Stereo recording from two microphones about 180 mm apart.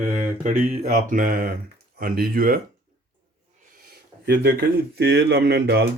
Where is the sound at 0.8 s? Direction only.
50° right (ahead or behind).